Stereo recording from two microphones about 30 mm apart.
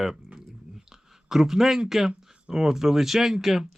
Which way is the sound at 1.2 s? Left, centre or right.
Centre.